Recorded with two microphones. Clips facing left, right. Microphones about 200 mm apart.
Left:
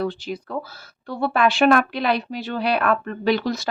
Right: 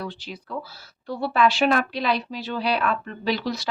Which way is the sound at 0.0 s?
50° left (ahead or behind).